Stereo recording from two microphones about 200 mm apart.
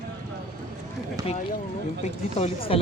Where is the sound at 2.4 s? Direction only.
30° left (ahead or behind).